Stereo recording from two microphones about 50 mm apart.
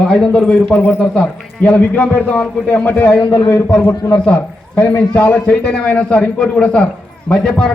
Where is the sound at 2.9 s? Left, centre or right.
Left.